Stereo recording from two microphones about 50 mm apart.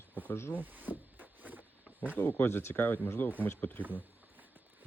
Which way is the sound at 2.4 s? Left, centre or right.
Left.